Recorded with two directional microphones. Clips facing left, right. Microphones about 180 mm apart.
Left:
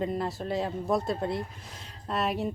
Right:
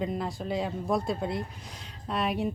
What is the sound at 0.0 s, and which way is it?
Speech, centre (ahead or behind).